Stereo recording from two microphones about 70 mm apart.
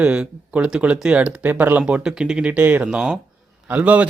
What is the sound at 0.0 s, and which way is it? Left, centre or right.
Speech, centre.